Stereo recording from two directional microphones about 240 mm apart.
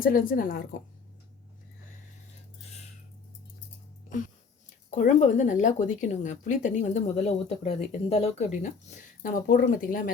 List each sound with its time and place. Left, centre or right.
0.0 s speech: left
4.9 s speech: left